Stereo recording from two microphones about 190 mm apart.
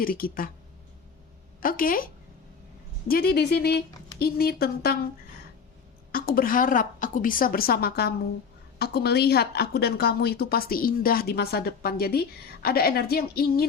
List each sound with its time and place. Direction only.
0.0 s a woman's voice: 50° left (ahead or behind)
1.6 s speech: 50° left (ahead or behind)
3.1 s a woman's voice: 55° left (ahead or behind)
6.1 s a woman's voice: 50° left (ahead or behind)